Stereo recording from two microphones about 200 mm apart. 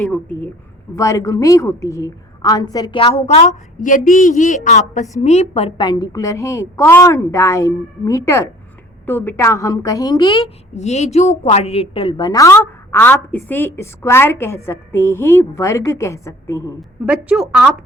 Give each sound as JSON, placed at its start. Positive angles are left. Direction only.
{"t": 0.0, "sound": "a woman's voice", "side_deg": 5}
{"t": 10.4, "sound": "a woman's voice", "side_deg": 35}
{"t": 17.1, "sound": "a woman's voice", "side_deg": -5}